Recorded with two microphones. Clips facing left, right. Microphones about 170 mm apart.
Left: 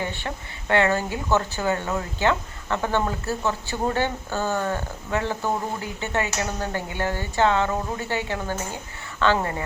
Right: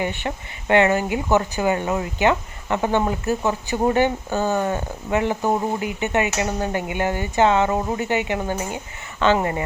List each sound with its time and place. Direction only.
0.0 s speech: 15° right (ahead or behind)